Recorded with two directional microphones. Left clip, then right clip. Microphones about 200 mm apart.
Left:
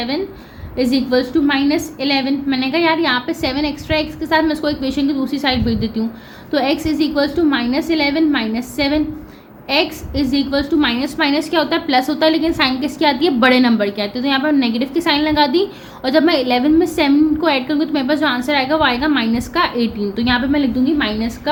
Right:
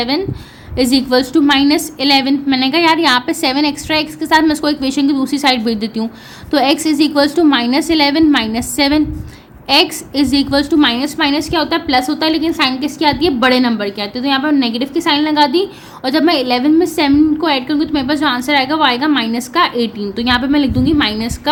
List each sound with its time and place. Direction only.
0.8 s a woman's voice: 35° right (ahead or behind)